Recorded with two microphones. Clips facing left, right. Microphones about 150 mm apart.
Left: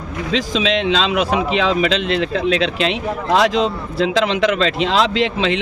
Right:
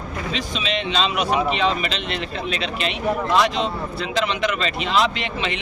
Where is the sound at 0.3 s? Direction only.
90° left.